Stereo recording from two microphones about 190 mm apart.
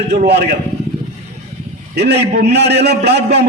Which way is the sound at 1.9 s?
60° right (ahead or behind).